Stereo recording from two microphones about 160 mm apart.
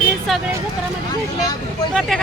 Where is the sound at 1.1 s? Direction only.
25° left (ahead or behind).